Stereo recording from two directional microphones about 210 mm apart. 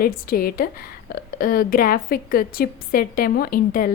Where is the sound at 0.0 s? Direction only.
45° left (ahead or behind).